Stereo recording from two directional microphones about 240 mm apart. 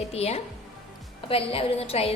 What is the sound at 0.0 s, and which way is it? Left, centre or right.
A woman's voice, left.